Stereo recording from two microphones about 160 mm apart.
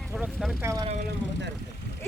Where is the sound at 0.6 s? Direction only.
20° right (ahead or behind).